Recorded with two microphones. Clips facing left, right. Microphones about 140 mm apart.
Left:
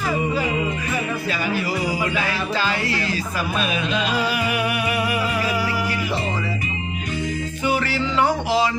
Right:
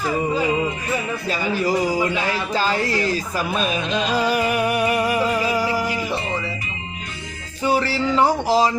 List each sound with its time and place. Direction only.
1.3 s speech: 40° right (ahead or behind)
4.1 s music: 40° right (ahead or behind)
7.6 s music: 35° right (ahead or behind)